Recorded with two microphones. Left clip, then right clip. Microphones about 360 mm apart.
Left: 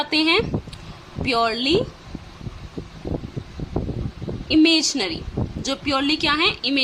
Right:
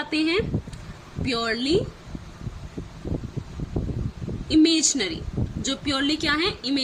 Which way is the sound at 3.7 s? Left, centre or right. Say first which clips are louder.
Left 4 dB; left.